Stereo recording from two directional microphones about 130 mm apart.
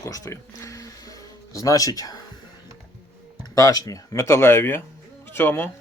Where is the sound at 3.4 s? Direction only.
25° left (ahead or behind).